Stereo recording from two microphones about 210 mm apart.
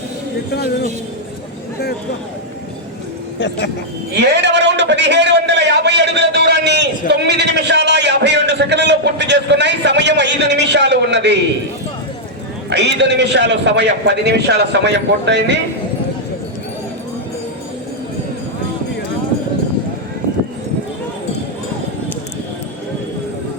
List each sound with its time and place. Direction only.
4.1 s a man's voice: 55° right (ahead or behind)
12.7 s a man's voice: 55° right (ahead or behind)